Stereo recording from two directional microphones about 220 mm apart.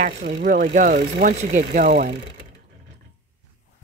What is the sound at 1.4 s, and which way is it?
Speech, 35° right (ahead or behind).